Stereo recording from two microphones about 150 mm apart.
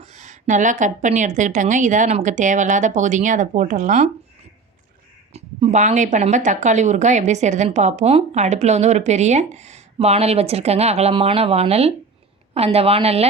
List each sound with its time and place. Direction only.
0.0 s a woman's voice: 55° right (ahead or behind)
5.3 s a woman's voice: 45° right (ahead or behind)